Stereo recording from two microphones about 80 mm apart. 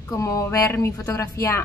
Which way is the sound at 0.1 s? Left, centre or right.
Left.